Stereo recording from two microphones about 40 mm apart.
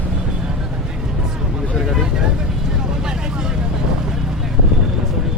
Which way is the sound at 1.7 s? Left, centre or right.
Centre.